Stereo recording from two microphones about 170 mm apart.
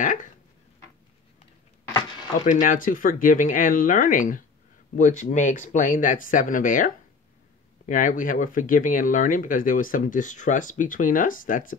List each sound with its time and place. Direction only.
0.0 s a sound: 50° left (ahead or behind)
2.4 s speech: 50° left (ahead or behind)
7.9 s speech: 50° left (ahead or behind)